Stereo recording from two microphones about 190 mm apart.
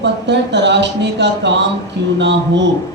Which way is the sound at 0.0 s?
65° right (ahead or behind).